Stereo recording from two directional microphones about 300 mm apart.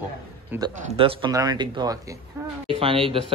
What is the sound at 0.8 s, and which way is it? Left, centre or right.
Speech, centre.